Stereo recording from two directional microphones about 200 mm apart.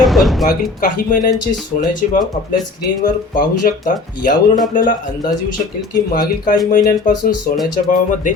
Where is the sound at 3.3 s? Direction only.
40° left (ahead or behind).